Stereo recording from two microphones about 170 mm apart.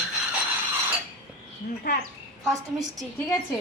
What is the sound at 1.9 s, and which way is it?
Speech, 60° left (ahead or behind).